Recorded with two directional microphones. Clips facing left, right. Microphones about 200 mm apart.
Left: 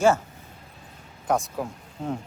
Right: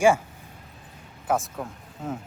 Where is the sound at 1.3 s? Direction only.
Centre (ahead or behind).